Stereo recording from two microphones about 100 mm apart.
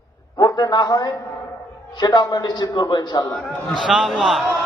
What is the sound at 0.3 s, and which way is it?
A man's voice, 40° left (ahead or behind).